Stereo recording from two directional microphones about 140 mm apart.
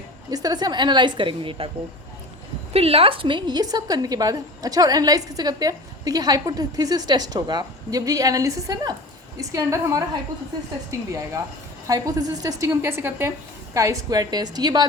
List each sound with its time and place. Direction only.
0.3 s a woman's voice: 25° right (ahead or behind)
2.7 s a woman's voice: 45° right (ahead or behind)